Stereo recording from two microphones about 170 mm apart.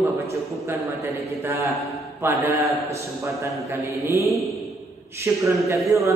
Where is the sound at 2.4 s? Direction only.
20° right (ahead or behind).